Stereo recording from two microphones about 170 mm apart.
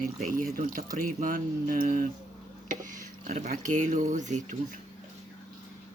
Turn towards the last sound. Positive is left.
turn(degrees=-45)  # may be behind; listen again after turning